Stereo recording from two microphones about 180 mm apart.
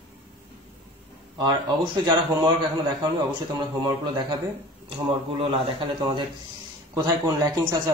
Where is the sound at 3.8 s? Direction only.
25° right (ahead or behind).